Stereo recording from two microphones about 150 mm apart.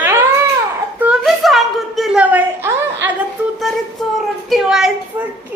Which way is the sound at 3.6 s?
Centre (ahead or behind).